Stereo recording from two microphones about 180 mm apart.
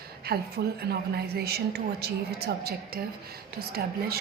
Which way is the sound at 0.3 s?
60° right (ahead or behind).